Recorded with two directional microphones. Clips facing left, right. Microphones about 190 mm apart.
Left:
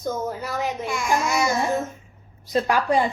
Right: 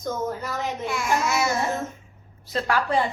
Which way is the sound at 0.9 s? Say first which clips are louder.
Right 1 dB; centre (ahead or behind).